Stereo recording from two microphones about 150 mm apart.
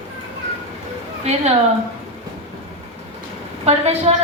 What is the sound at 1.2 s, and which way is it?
Speech, 45° right (ahead or behind).